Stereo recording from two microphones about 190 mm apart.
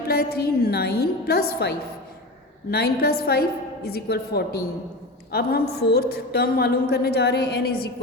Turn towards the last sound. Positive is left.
turn(degrees=55)  # may be behind; listen again after turning